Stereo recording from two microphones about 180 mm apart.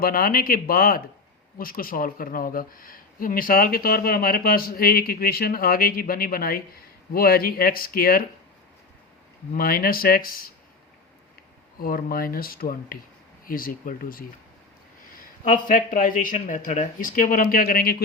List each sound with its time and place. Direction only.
0.0 s speech: 55° left (ahead or behind)
9.5 s speech: 55° left (ahead or behind)
11.8 s speech: 55° left (ahead or behind)